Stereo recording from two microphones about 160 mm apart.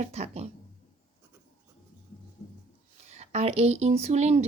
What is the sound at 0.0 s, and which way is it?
Speech, 45° right (ahead or behind).